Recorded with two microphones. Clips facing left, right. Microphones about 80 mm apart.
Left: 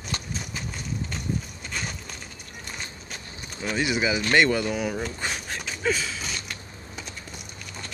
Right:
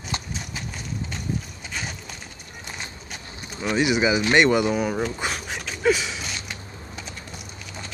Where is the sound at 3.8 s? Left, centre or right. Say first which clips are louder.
Right 4 dB; centre.